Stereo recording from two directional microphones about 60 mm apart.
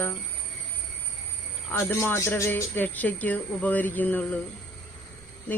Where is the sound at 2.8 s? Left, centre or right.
Left.